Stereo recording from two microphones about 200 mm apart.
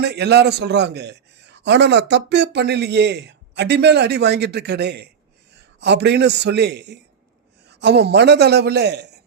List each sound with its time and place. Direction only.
0.0 s a man's voice: 55° right (ahead or behind)